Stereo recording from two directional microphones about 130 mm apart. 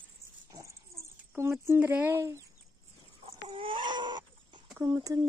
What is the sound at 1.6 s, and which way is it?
Speech, 15° right (ahead or behind).